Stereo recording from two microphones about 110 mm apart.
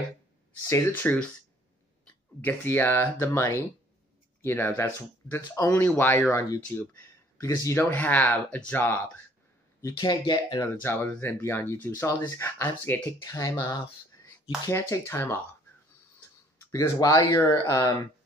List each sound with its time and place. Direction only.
0.7 s speech: 20° left (ahead or behind)
2.4 s speech: 20° left (ahead or behind)
9.9 s speech: 40° left (ahead or behind)
10.6 s speech: 20° left (ahead or behind)
13.2 s speech: 30° left (ahead or behind)
14.7 s speech: 25° left (ahead or behind)
16.7 s speech: 30° left (ahead or behind)